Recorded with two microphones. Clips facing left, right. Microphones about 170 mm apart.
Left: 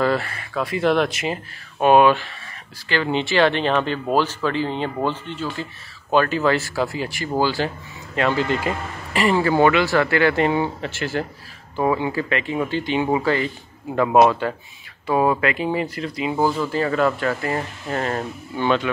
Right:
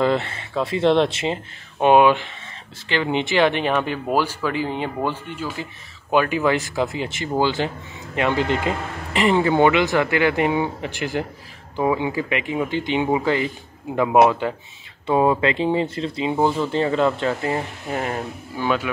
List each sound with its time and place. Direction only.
0.0 s speech: 20° right (ahead or behind)
15.0 s speech: 25° right (ahead or behind); by 18.9 s 5° right (ahead or behind)